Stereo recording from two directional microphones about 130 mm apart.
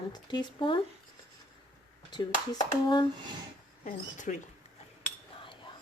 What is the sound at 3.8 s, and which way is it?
Speech, 70° left (ahead or behind).